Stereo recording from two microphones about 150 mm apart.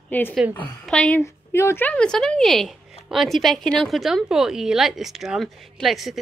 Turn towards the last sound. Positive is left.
turn(degrees=0)  # may be behind; listen again after turning